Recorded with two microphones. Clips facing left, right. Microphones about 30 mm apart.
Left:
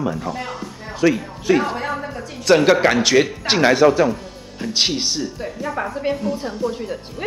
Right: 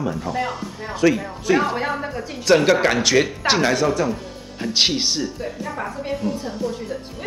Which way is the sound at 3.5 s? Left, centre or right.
Centre.